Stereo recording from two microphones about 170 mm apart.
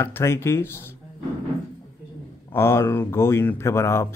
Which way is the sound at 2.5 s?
15° left (ahead or behind).